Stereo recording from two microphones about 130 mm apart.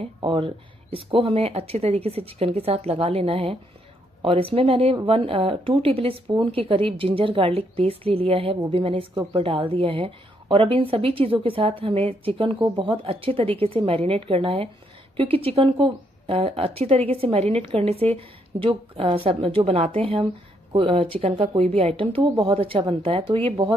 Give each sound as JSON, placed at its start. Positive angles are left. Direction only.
{"t": 0.0, "sound": "speech", "side_deg": -40}